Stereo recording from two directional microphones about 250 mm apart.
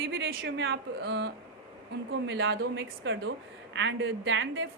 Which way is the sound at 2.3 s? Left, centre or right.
Right.